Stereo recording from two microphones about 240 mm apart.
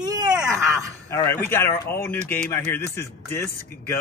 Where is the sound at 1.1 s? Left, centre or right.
Centre.